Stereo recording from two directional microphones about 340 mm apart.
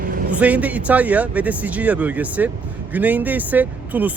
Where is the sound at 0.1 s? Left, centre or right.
Right.